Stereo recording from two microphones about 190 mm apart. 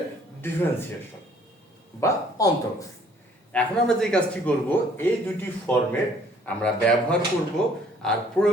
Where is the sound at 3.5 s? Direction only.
5° left (ahead or behind).